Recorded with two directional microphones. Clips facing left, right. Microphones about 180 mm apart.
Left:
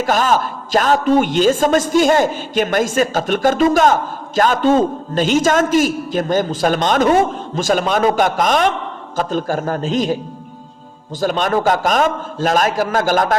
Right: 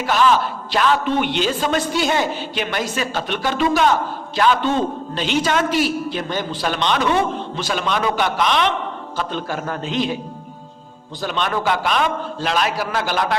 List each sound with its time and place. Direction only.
0.0 s a man's voice: 45° left (ahead or behind)
11.2 s a man's voice: 45° left (ahead or behind)